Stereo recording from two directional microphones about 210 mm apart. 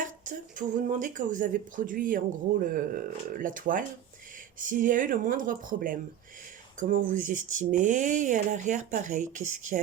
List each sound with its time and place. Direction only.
0.0 s speech: 40° right (ahead or behind)